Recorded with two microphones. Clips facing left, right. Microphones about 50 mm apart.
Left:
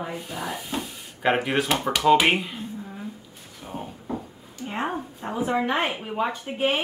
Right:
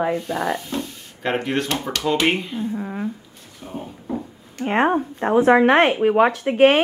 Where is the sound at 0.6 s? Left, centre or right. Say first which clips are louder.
Right 3 dB; centre.